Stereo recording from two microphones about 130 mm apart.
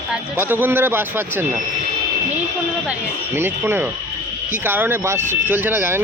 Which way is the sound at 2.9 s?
15° right (ahead or behind).